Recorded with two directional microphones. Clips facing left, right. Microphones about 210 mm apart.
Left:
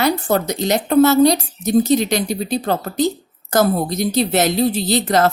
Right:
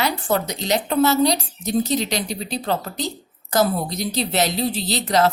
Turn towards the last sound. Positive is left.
turn(degrees=50)  # may be behind; listen again after turning